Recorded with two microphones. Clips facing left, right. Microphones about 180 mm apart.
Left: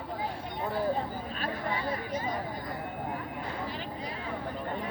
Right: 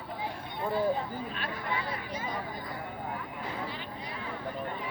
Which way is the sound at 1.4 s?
40° left (ahead or behind).